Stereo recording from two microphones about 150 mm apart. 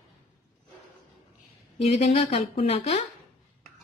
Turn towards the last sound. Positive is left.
turn(degrees=45)  # may be behind; listen again after turning